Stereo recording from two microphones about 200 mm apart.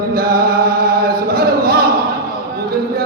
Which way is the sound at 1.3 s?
50° right (ahead or behind).